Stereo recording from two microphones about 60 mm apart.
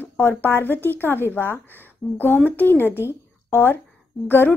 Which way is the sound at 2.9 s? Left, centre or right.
Left.